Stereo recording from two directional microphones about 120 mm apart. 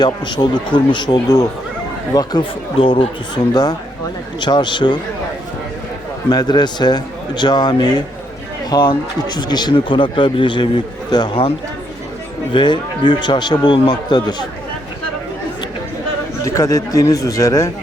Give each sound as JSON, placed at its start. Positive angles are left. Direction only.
{"t": 0.0, "sound": "a man's voice", "side_deg": 40}
{"t": 2.7, "sound": "a man's voice", "side_deg": 50}
{"t": 6.3, "sound": "a man's voice", "side_deg": 35}
{"t": 12.5, "sound": "a man's voice", "side_deg": 40}
{"t": 16.4, "sound": "speech", "side_deg": 25}